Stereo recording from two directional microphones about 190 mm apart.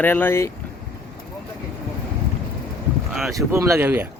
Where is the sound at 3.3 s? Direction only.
15° right (ahead or behind).